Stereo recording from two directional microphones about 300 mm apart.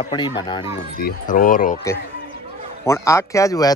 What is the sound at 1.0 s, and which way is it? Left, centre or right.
Speech, left.